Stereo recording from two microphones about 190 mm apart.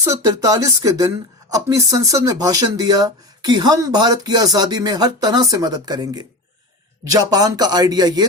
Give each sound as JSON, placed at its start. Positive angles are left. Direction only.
{"t": 0.0, "sound": "speech", "side_deg": -15}